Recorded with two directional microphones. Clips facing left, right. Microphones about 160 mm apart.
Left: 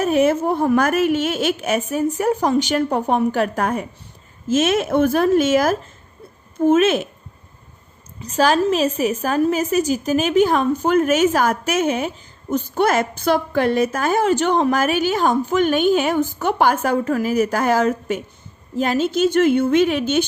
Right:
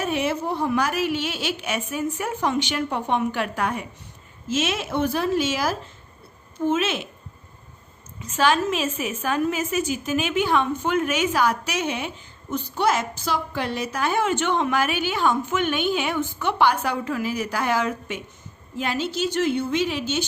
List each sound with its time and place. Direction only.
0.0 s a woman's voice: 45° left (ahead or behind)
8.2 s a woman's voice: 40° left (ahead or behind); by 20.2 s 55° left (ahead or behind)